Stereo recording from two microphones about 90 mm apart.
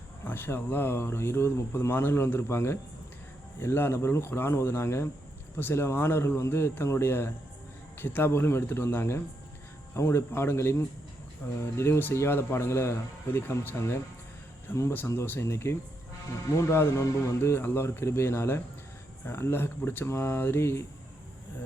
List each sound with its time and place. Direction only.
0.3 s speech: 25° left (ahead or behind)